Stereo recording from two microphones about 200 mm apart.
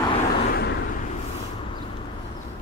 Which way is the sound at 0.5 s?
55° left (ahead or behind).